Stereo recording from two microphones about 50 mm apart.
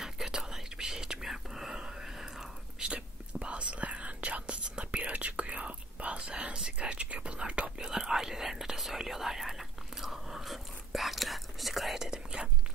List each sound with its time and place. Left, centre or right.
0.0 s whispering: centre
2.8 s whispering: right
7.9 s whispering: centre